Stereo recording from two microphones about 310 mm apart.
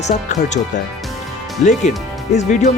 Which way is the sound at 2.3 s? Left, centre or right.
Left.